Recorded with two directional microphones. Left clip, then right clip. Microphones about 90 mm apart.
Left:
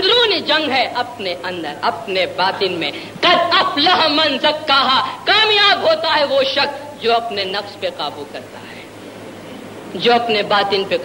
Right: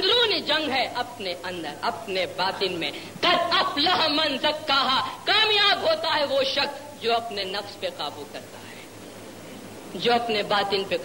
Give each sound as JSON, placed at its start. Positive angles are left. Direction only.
{"t": 0.0, "sound": "a man's voice", "side_deg": 30}
{"t": 9.9, "sound": "a man's voice", "side_deg": 40}